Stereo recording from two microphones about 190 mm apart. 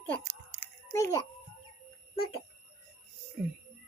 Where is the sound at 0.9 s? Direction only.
15° left (ahead or behind).